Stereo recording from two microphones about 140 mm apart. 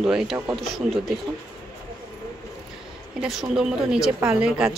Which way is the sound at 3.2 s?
5° right (ahead or behind).